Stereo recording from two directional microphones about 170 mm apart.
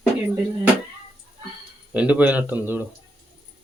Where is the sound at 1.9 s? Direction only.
10° right (ahead or behind).